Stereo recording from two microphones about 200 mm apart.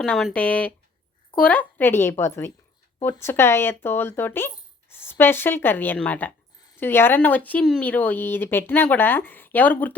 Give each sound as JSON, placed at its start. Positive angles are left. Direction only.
{"t": 0.0, "sound": "speech", "side_deg": 0}